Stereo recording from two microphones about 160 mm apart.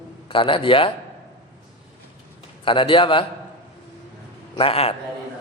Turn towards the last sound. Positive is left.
turn(degrees=35)  # may be behind; listen again after turning